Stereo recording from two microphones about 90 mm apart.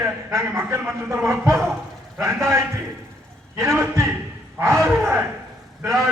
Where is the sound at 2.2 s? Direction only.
30° right (ahead or behind).